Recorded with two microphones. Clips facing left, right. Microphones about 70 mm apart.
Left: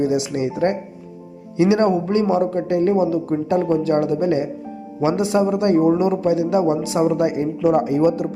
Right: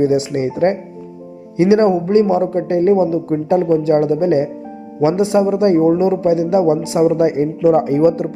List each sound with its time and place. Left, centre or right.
0.0 s speech: right